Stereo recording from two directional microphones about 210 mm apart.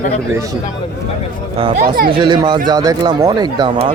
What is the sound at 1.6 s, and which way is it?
Speech, 35° right (ahead or behind).